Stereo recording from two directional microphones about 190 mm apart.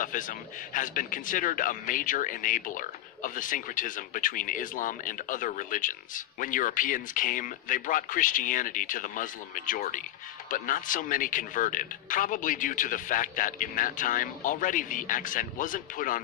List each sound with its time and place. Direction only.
0.0 s a man's voice: 45° left (ahead or behind)